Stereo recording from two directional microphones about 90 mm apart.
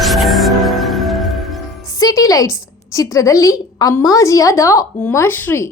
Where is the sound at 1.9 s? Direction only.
45° left (ahead or behind).